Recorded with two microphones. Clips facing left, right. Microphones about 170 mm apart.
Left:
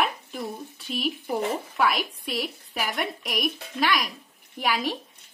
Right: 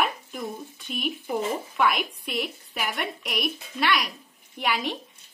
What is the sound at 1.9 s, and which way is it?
Speech, 35° left (ahead or behind).